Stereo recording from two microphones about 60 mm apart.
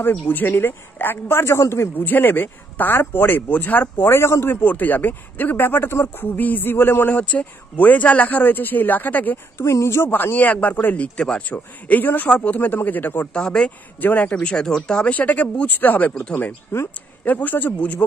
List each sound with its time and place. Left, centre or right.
0.0 s a man's voice: left
2.0 s a man's voice: left
7.1 s speech: left
9.6 s speech: left
10.3 s speech: left
11.0 s speech: centre
11.4 s a man's voice: left
13.3 s speech: centre
13.9 s a man's voice: left
17.2 s speech: left